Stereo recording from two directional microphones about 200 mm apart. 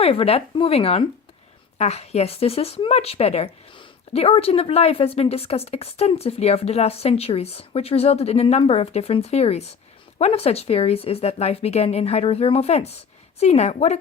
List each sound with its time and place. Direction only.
0.0 s speech: 30° left (ahead or behind)